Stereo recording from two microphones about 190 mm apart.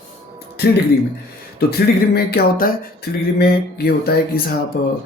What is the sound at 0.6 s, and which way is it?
Speech, 60° left (ahead or behind).